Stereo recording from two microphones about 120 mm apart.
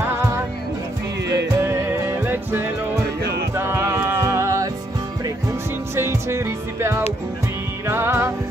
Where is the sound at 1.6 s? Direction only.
20° right (ahead or behind).